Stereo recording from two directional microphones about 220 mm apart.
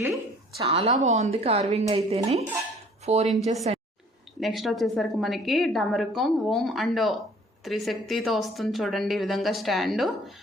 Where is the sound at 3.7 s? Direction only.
30° right (ahead or behind).